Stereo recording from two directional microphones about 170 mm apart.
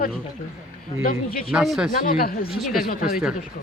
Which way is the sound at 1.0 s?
60° left (ahead or behind).